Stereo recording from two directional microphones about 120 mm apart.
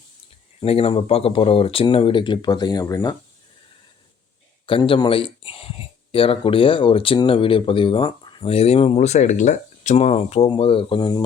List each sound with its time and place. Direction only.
0.6 s speech: 55° left (ahead or behind); by 3.0 s 30° left (ahead or behind)
4.6 s a man's voice: 45° left (ahead or behind)
10.5 s speech: 50° left (ahead or behind)